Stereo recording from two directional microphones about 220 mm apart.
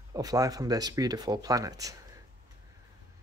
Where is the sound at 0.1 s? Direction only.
15° right (ahead or behind).